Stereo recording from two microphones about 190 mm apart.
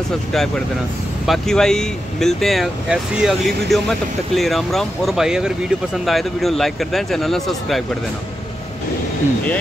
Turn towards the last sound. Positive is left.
turn(degrees=0)  # may be behind; listen again after turning